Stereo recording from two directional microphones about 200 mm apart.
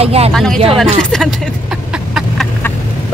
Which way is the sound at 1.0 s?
5° left (ahead or behind).